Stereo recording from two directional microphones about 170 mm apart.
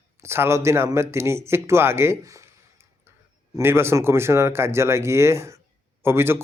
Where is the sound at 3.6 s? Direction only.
15° right (ahead or behind).